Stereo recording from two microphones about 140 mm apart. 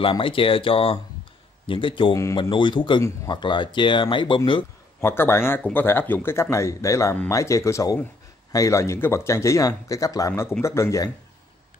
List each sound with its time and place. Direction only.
0.0 s speech: 40° left (ahead or behind)
5.0 s speech: 15° left (ahead or behind)